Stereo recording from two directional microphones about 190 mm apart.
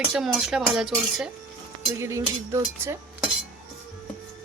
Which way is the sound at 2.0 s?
15° right (ahead or behind).